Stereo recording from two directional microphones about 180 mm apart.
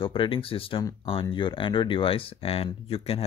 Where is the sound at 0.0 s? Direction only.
30° left (ahead or behind).